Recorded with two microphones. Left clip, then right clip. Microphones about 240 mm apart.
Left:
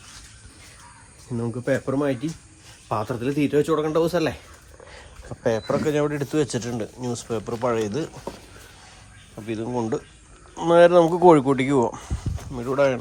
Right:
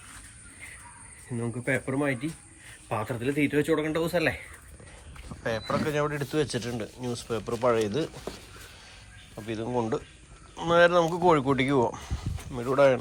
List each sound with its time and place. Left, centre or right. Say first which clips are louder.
1.4 s speech: left 5 dB; centre
5.3 s a sound: left 8 dB; left
5.6 s speech: left 5 dB; centre
9.5 s speech: left 3 dB; centre